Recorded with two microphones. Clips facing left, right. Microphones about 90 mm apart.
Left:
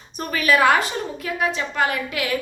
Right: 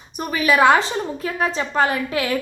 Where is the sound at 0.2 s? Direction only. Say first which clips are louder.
Right 2 dB; 15° right (ahead or behind).